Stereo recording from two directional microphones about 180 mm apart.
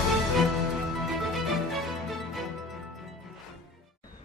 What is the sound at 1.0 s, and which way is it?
Music, centre (ahead or behind).